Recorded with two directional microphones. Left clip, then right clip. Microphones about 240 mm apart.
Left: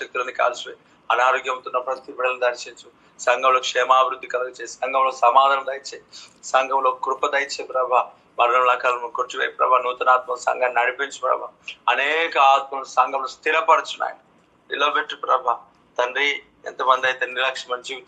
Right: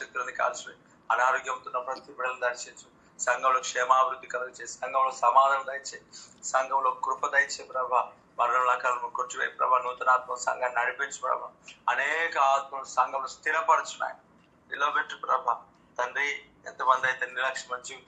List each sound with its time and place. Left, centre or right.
0.0 s a man's voice: left
10.2 s a man's voice: left
10.6 s a man's voice: left